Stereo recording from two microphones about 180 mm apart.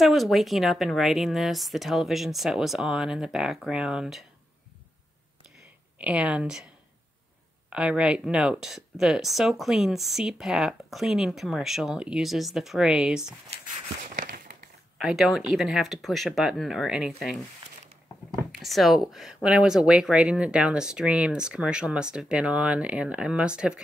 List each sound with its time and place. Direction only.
0.0 s speech: centre (ahead or behind)
5.9 s speech: 5° right (ahead or behind)
7.7 s speech: 5° right (ahead or behind)
14.1 s a sound: 50° right (ahead or behind)
15.0 s speech: centre (ahead or behind)
18.5 s speech: centre (ahead or behind)